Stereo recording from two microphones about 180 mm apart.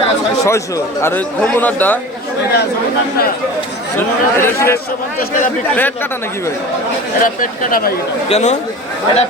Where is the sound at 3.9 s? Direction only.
15° left (ahead or behind).